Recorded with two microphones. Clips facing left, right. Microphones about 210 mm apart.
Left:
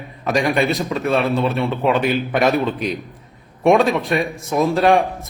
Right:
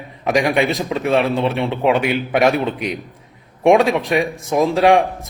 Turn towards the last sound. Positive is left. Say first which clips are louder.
# right 2 dB
turn(degrees=-15)  # may be behind; listen again after turning